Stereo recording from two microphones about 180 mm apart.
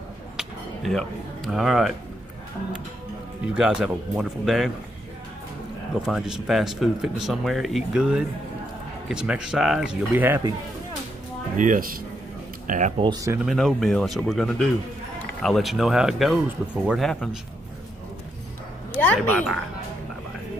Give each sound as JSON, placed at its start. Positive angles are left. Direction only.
{"t": 0.4, "sound": "speech", "side_deg": 0}
{"t": 3.5, "sound": "speech", "side_deg": -5}
{"t": 6.0, "sound": "speech", "side_deg": -5}
{"t": 11.5, "sound": "speech", "side_deg": -45}
{"t": 13.0, "sound": "speech", "side_deg": -20}
{"t": 13.4, "sound": "speech", "side_deg": 0}
{"t": 18.9, "sound": "speech", "side_deg": 10}